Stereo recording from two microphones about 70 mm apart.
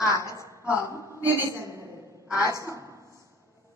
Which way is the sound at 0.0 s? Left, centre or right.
Left.